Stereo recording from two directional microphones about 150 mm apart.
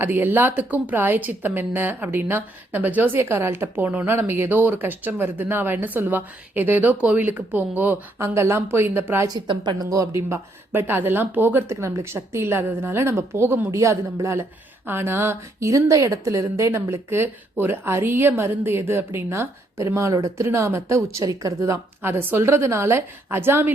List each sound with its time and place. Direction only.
0.0 s a woman's voice: 15° right (ahead or behind)